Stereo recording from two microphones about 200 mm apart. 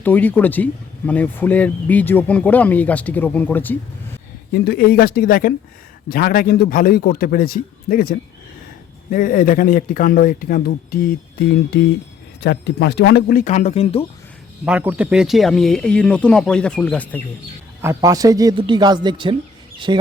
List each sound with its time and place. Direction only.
0.0 s speech: 10° left (ahead or behind)
4.5 s speech: 55° left (ahead or behind); by 14.0 s 30° left (ahead or behind)
14.6 s speech: 5° right (ahead or behind)
17.8 s speech: 15° right (ahead or behind)